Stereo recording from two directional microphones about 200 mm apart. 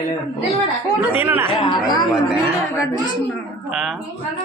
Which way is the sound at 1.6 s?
20° left (ahead or behind).